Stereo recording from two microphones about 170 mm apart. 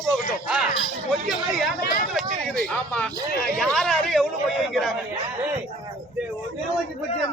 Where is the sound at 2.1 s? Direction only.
5° left (ahead or behind).